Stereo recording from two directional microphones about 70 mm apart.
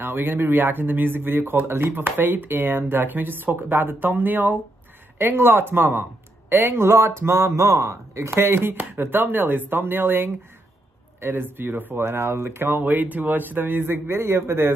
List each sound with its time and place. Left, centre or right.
0.0 s speech: right